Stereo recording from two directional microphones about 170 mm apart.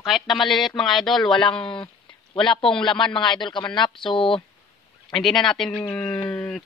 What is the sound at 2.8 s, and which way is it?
A man's voice, 30° left (ahead or behind).